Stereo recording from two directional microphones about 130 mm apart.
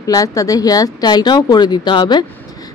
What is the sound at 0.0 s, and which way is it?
A woman's voice, 25° left (ahead or behind).